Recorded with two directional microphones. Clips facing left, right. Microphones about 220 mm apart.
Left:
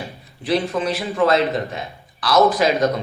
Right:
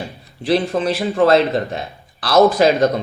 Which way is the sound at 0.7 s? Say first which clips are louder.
Right 3 dB; 50° right (ahead or behind).